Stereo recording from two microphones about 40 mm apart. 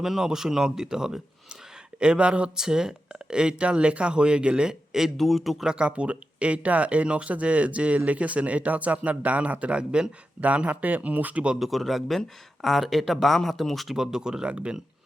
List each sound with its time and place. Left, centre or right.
0.0 s a man's voice: centre
2.0 s speech: right
2.6 s speech: centre
5.1 s speech: centre
5.6 s speech: right
10.4 s speech: right
11.6 s speech: centre
13.9 s speech: centre